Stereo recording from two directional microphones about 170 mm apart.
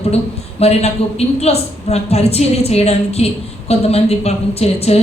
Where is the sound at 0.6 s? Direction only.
35° left (ahead or behind).